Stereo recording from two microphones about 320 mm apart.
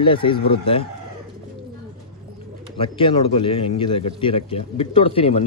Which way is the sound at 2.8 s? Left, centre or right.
Centre.